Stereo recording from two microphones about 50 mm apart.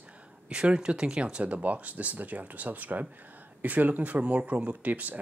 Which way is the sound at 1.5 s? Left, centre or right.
Right.